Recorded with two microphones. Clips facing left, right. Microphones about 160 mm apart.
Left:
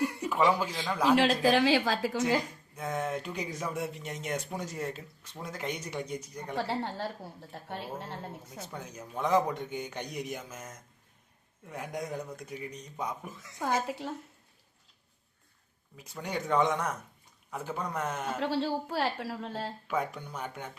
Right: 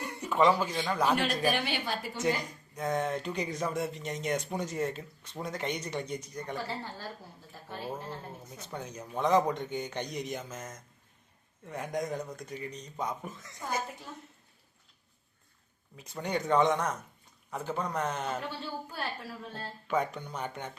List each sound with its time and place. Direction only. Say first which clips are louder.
0.0 s a man's voice: right 1 dB; 5° left (ahead or behind)
1.1 s a woman's voice: left 5 dB; 90° left
2.7 s speech: right 2 dB; 5° left (ahead or behind)
6.6 s a woman's voice: left 6 dB; 70° left (ahead or behind)
8.7 s a man's voice: right 3 dB; 5° left (ahead or behind)
13.6 s a woman's voice: left 5 dB; 90° left
16.0 s a man's voice: right 3 dB; 5° left (ahead or behind)
18.3 s a woman's voice: left 7 dB; 90° left
19.9 s speech: right 3 dB; 5° left (ahead or behind)